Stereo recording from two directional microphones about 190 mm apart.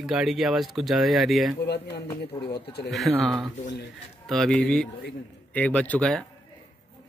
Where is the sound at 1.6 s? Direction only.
60° left (ahead or behind).